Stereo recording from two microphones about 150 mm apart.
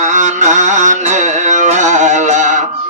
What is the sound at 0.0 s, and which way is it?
Music, 55° right (ahead or behind).